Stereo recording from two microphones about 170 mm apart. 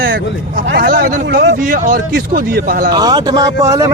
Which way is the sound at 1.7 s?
50° right (ahead or behind).